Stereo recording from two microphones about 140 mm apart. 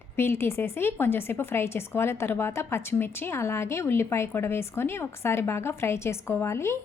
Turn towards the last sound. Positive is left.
turn(degrees=20)  # may be behind; listen again after turning